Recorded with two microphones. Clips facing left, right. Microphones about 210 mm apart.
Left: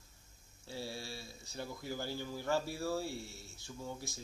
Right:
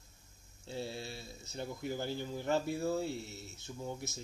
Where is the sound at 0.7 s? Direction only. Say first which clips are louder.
Right 3 dB; 20° right (ahead or behind).